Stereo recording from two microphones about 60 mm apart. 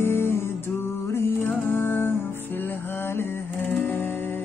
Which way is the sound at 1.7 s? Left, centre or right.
Left.